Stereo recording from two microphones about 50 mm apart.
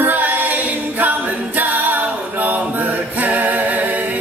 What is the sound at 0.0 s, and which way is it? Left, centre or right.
A capella, right.